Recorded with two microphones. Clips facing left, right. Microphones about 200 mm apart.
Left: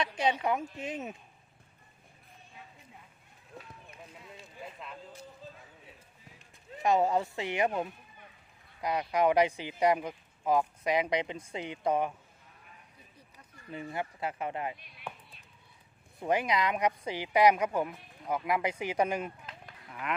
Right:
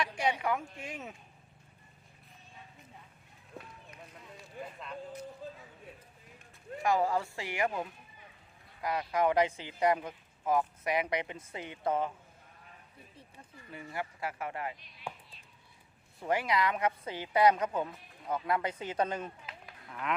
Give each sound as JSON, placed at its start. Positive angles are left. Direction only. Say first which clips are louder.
{"t": 0.0, "sound": "speech", "louder": "left 2 dB", "side_deg": 20}
{"t": 4.6, "sound": "a sound", "louder": "right 4 dB", "side_deg": -55}
{"t": 6.8, "sound": "speech", "louder": "left 3 dB", "side_deg": 20}
{"t": 13.7, "sound": "speech", "louder": "left 3 dB", "side_deg": 20}
{"t": 16.2, "sound": "speech", "louder": "left 1 dB", "side_deg": 20}
{"t": 19.5, "sound": "cattle", "louder": "even", "side_deg": 0}